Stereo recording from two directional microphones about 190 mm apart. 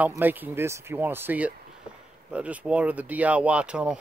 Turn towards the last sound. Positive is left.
turn(degrees=-5)  # may be behind; listen again after turning